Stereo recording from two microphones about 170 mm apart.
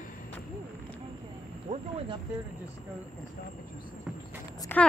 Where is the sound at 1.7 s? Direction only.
40° right (ahead or behind).